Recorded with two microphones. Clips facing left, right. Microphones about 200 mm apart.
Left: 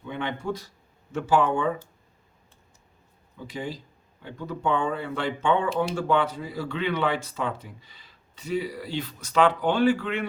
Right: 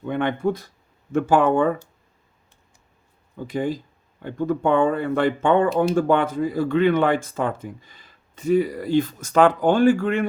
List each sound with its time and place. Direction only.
0.0 s speech: 55° right (ahead or behind)
3.3 s speech: 50° right (ahead or behind)